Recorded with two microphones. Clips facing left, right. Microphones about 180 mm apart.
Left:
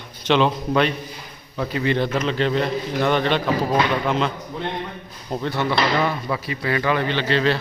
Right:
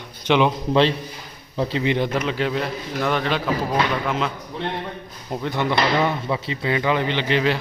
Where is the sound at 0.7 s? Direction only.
25° right (ahead or behind); by 4.3 s 5° right (ahead or behind).